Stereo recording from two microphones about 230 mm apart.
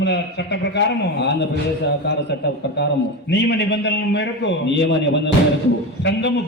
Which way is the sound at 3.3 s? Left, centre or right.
Left.